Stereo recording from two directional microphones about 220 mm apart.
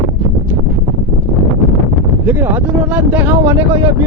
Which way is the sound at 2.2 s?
10° right (ahead or behind).